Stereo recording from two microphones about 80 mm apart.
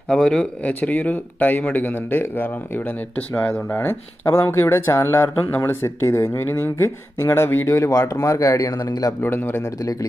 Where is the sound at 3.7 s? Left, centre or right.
Left.